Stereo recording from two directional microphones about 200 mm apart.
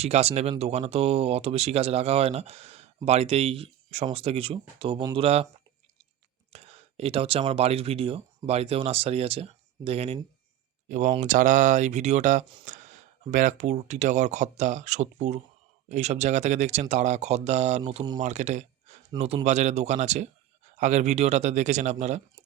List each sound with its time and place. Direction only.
0.0 s speech: 30° right (ahead or behind)
6.5 s speech: 30° right (ahead or behind)